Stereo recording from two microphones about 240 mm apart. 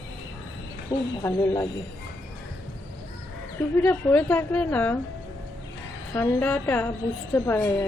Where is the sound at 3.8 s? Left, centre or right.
Centre.